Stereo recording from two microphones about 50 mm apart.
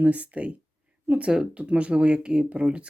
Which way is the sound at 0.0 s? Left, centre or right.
Right.